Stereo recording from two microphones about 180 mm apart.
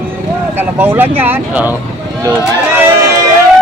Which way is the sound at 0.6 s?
10° right (ahead or behind).